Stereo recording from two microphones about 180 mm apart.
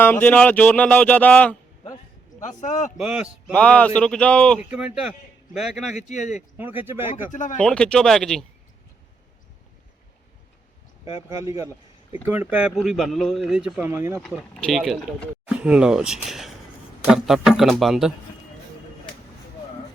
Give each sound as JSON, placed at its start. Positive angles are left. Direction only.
{"t": 0.0, "sound": "speech", "side_deg": 10}
{"t": 2.4, "sound": "speech", "side_deg": 40}
{"t": 3.0, "sound": "speech", "side_deg": -5}
{"t": 3.5, "sound": "speech", "side_deg": 5}
{"t": 4.7, "sound": "speech", "side_deg": -5}
{"t": 5.9, "sound": "speech", "side_deg": 40}
{"t": 6.6, "sound": "speech", "side_deg": -10}
{"t": 7.3, "sound": "speech", "side_deg": 45}
{"t": 7.6, "sound": "speech", "side_deg": 5}
{"t": 11.3, "sound": "speech", "side_deg": -15}
{"t": 14.2, "sound": "speech", "side_deg": 5}
{"t": 15.4, "sound": "speech", "side_deg": -5}